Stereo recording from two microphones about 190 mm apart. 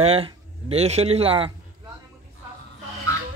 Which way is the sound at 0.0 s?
30° right (ahead or behind).